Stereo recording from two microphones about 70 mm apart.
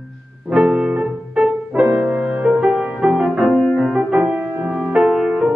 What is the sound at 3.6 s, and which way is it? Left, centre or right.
Music, centre.